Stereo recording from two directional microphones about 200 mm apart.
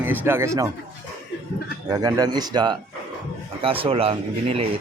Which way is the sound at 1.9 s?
20° right (ahead or behind).